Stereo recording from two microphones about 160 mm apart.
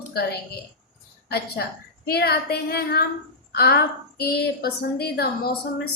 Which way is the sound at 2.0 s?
75° left (ahead or behind).